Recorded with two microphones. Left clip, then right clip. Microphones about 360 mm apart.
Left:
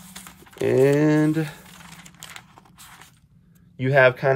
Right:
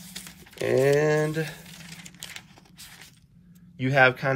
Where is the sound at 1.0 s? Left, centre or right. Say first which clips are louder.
Left 3 dB; left.